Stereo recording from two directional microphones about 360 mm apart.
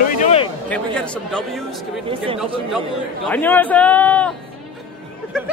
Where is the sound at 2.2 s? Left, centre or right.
Centre.